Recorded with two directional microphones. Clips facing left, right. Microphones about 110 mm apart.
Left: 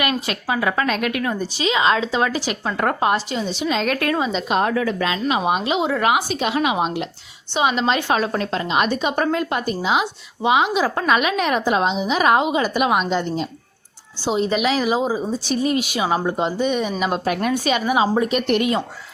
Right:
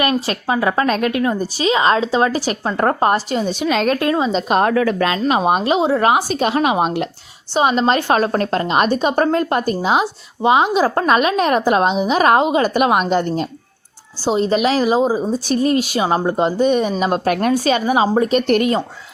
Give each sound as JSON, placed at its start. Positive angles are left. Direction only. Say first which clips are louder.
{"t": 0.0, "sound": "speech", "louder": "right 4 dB", "side_deg": -35}
{"t": 1.4, "sound": "a woman's voice", "louder": "right 3 dB", "side_deg": -40}
{"t": 3.8, "sound": "a woman's voice", "louder": "right 4 dB", "side_deg": -25}
{"t": 4.3, "sound": "a woman's voice", "louder": "right 4 dB", "side_deg": -45}
{"t": 5.2, "sound": "a woman's voice", "louder": "right 4 dB", "side_deg": -40}
{"t": 7.5, "sound": "a woman's voice", "louder": "right 4 dB", "side_deg": -40}
{"t": 14.2, "sound": "a woman's voice", "louder": "right 4 dB", "side_deg": -40}
{"t": 17.2, "sound": "a woman's voice", "louder": "right 4 dB", "side_deg": -55}
{"t": 17.5, "sound": "speech", "louder": "right 2 dB", "side_deg": -40}